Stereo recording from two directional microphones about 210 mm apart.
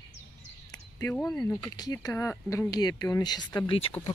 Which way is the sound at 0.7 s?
15° left (ahead or behind).